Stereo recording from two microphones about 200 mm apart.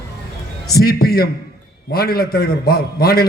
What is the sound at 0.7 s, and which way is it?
A man's voice, 50° left (ahead or behind).